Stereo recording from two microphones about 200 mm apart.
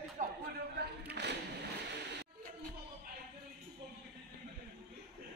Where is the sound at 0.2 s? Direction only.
40° right (ahead or behind).